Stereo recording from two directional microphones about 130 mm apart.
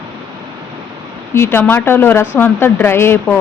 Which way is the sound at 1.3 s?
20° left (ahead or behind).